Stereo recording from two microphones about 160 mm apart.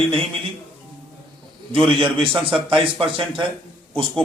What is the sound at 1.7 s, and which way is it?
A man's voice, 35° right (ahead or behind).